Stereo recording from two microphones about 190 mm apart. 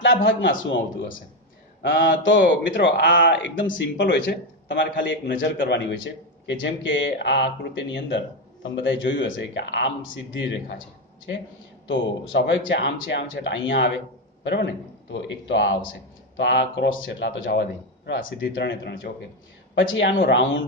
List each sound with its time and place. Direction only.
0.0 s a man's voice: 75° left (ahead or behind)
1.8 s speech: 75° left (ahead or behind)
5.3 s a man's voice: 55° left (ahead or behind)
6.4 s speech: 75° left (ahead or behind)
11.9 s speech: 75° left (ahead or behind)
19.7 s speech: 75° left (ahead or behind)